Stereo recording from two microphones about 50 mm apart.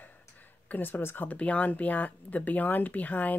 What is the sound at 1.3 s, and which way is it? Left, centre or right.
Speech, left.